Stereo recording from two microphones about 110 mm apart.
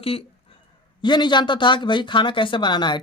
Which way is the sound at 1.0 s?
45° left (ahead or behind).